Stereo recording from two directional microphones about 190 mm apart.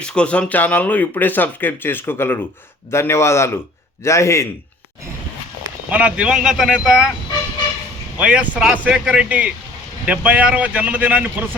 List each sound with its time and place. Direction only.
0.0 s speech: 5° left (ahead or behind)
5.9 s speech: 5° right (ahead or behind)
8.2 s speech: 5° right (ahead or behind)